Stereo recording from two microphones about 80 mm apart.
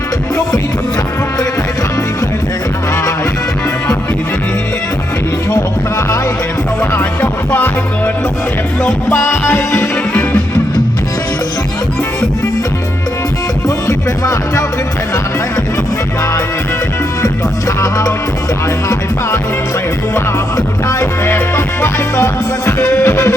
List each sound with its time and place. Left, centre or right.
6.9 s music: left
9.0 s music: left
13.7 s music: left
17.7 s music: left
20.8 s music: left